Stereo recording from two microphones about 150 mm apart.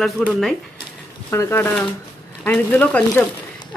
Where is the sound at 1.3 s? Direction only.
15° left (ahead or behind).